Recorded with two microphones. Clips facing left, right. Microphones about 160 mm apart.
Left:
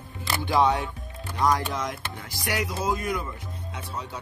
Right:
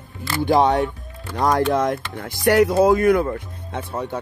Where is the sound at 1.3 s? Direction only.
60° right (ahead or behind).